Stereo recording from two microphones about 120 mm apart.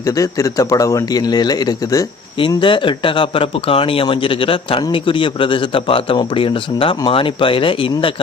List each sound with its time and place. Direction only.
0.0 s speech: 30° left (ahead or behind)
2.6 s speech: 45° left (ahead or behind)